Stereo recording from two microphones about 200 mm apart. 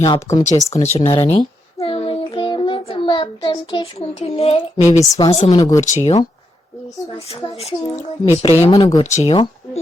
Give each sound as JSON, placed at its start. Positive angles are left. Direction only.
{"t": 0.1, "sound": "speech", "side_deg": 20}
{"t": 0.7, "sound": "a child's voice", "side_deg": 35}
{"t": 5.1, "sound": "speech", "side_deg": 20}
{"t": 5.8, "sound": "speech", "side_deg": 40}
{"t": 7.3, "sound": "speech", "side_deg": 30}